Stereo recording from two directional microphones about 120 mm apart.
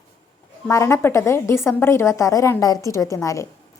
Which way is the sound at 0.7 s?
20° left (ahead or behind).